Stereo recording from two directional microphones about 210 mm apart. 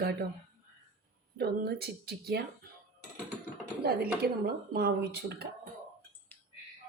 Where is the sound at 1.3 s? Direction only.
50° right (ahead or behind).